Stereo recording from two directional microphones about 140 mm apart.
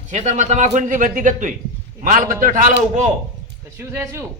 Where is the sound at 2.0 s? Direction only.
80° right.